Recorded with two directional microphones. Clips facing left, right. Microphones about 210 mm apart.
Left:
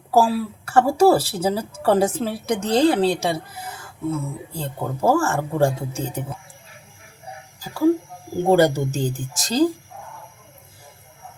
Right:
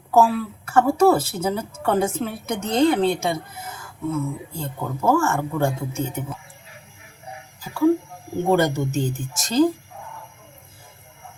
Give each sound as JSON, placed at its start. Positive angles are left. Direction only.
{"t": 0.1, "sound": "a woman's voice", "side_deg": 30}
{"t": 8.4, "sound": "a woman's voice", "side_deg": 35}